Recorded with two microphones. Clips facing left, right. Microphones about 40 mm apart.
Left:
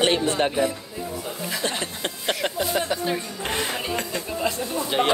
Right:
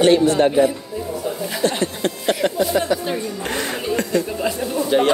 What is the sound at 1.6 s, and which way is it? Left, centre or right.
Speech, left.